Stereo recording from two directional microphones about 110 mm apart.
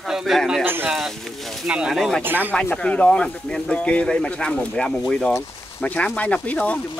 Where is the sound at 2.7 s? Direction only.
10° left (ahead or behind).